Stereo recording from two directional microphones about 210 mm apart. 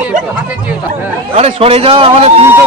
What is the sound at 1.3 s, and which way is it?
A man's voice, 30° right (ahead or behind).